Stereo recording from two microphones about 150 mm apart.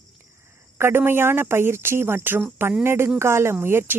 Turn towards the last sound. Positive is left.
turn(degrees=-15)  # may be behind; listen again after turning